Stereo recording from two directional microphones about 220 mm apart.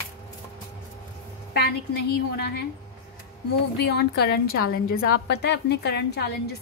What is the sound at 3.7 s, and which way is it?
A woman's voice, 50° left (ahead or behind).